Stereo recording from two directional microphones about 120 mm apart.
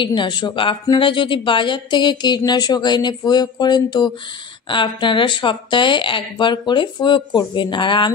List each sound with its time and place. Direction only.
0.0 s a woman's voice: 40° left (ahead or behind)